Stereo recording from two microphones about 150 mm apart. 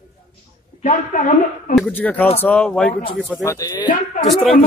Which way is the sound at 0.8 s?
60° left (ahead or behind).